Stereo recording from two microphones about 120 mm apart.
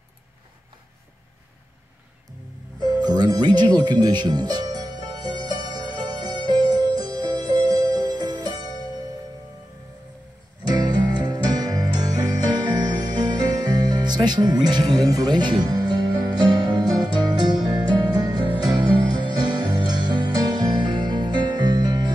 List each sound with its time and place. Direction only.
2.8 s music: 35° right (ahead or behind)
10.7 s music: 35° right (ahead or behind)